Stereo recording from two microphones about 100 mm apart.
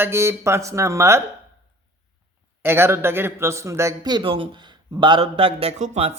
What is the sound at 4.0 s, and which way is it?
Speech, 50° right (ahead or behind).